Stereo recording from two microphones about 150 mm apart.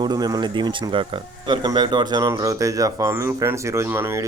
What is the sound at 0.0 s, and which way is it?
Speech, 25° right (ahead or behind).